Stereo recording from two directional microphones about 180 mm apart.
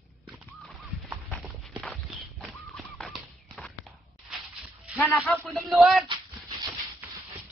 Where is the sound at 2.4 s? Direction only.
Centre (ahead or behind).